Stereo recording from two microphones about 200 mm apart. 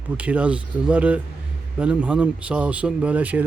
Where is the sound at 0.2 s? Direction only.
5° right (ahead or behind).